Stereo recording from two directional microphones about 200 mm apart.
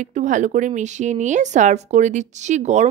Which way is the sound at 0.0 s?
40° right (ahead or behind).